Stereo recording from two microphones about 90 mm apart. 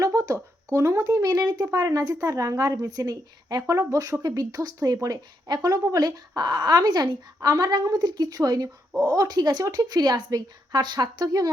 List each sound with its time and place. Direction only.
0.0 s a sound: 35° right (ahead or behind)
0.7 s a woman's voice: 35° right (ahead or behind)
7.3 s a woman's voice: 35° right (ahead or behind)